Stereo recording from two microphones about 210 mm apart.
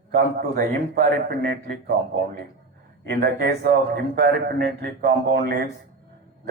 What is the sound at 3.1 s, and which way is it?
A man's voice, 45° right (ahead or behind).